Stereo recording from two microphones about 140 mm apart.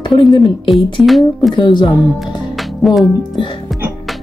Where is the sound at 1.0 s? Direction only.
Centre (ahead or behind).